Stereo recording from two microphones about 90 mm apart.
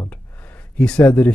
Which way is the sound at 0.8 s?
10° left (ahead or behind).